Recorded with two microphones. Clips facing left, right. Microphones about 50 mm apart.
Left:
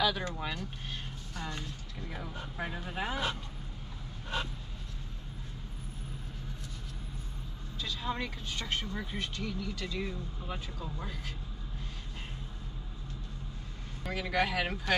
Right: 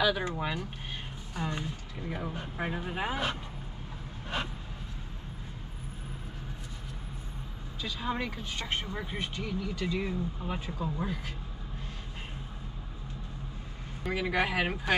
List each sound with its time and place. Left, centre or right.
0.0 s speech: centre
7.8 s speech: centre
14.1 s speech: centre